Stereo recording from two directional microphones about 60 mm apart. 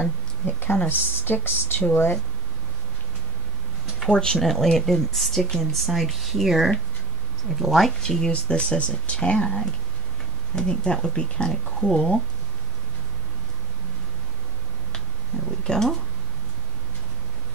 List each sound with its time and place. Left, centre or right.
0.0 s a woman's voice: left
4.1 s speech: centre
15.6 s speech: centre